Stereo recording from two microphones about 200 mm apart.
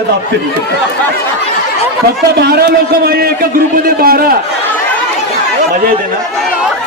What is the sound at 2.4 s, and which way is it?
A man's voice, 55° right (ahead or behind).